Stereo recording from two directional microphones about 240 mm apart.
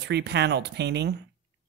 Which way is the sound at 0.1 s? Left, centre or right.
Right.